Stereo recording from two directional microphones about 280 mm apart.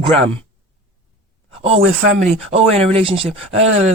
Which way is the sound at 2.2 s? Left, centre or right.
Right.